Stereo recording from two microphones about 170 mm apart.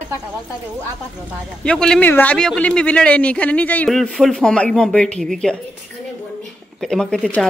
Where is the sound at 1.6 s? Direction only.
5° left (ahead or behind).